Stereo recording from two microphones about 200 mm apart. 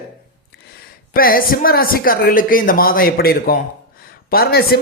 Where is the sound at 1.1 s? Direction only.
45° left (ahead or behind).